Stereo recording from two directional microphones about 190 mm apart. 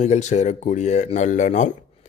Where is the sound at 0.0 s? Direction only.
40° left (ahead or behind).